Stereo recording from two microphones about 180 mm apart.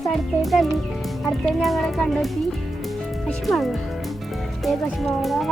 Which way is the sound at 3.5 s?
Centre (ahead or behind).